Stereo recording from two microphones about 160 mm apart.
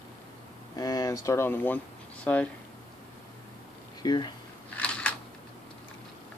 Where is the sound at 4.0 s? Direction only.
25° left (ahead or behind).